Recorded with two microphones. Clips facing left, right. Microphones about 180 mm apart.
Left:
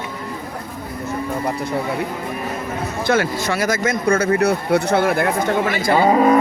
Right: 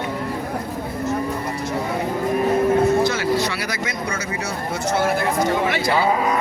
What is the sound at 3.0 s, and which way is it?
Speech, 55° left (ahead or behind).